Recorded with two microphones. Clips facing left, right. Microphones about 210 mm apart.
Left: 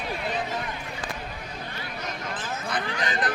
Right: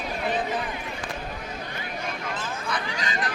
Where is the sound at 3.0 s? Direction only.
55° left (ahead or behind).